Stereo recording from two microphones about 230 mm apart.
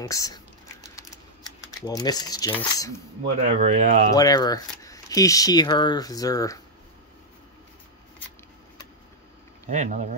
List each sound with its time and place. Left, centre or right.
0.0 s speech: centre
0.9 s typing: centre
3.4 s speech: right
4.1 s speech: centre
9.7 s speech: right